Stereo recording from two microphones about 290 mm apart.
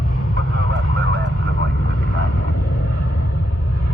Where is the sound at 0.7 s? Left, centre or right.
Right.